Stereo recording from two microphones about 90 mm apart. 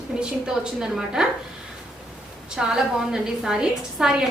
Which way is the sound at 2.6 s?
5° right (ahead or behind).